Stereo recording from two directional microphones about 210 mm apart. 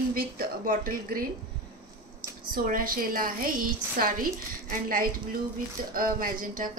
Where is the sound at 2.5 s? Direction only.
40° right (ahead or behind).